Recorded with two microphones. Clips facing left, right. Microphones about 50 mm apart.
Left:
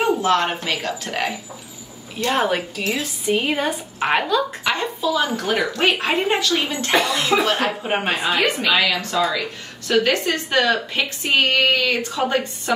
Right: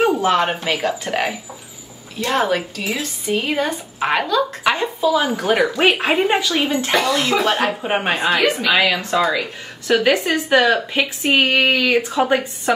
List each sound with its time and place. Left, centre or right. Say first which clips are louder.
0.2 s a woman's voice: right 2 dB; centre
2.1 s a woman's voice: right 1 dB; centre
4.6 s a woman's voice: right 4 dB; centre
7.3 s speech: left 4 dB; centre
7.6 s a woman's voice: right 2 dB; centre
8.6 s a woman's voice: right 2 dB; centre